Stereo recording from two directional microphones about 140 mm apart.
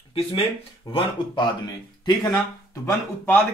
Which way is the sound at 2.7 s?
20° left (ahead or behind).